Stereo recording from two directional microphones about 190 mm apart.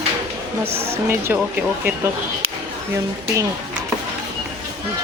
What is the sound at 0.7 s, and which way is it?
Speech, 15° right (ahead or behind).